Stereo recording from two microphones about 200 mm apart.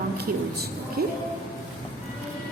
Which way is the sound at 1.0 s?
55° right (ahead or behind).